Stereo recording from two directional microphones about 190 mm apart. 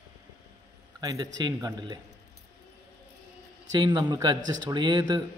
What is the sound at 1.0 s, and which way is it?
Speech, 15° right (ahead or behind).